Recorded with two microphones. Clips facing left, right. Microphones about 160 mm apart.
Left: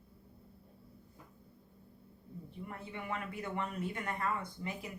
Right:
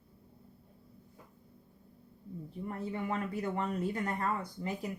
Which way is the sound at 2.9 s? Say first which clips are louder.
Right 5 dB; 35° right (ahead or behind).